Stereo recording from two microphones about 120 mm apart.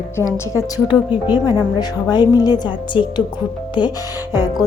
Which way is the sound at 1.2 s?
35° left (ahead or behind).